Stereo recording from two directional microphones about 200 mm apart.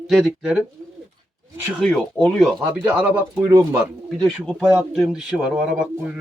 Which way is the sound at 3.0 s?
10° right (ahead or behind).